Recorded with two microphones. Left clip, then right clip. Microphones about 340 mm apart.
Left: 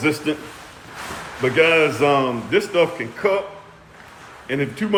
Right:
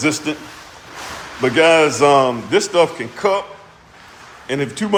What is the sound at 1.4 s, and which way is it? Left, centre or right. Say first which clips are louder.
A man's voice: right 3 dB; centre.